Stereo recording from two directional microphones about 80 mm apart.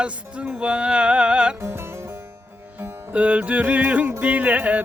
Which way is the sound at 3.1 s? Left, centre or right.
Centre.